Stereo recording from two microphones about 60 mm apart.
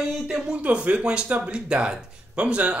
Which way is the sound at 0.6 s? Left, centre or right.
Right.